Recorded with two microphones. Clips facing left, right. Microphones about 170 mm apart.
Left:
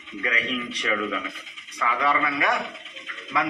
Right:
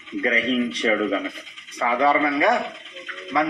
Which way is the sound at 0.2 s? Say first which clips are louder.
Right 8 dB; 30° right (ahead or behind).